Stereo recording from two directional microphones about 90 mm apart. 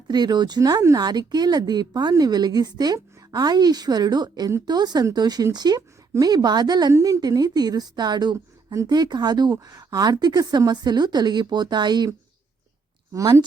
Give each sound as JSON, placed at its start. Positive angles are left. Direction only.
{"t": 0.1, "sound": "a woman's voice", "side_deg": -50}
{"t": 1.0, "sound": "a woman's voice", "side_deg": -50}
{"t": 6.9, "sound": "a woman's voice", "side_deg": -40}
{"t": 13.1, "sound": "speech", "side_deg": -35}